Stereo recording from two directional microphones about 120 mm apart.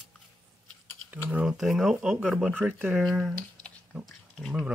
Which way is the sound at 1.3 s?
5° right (ahead or behind).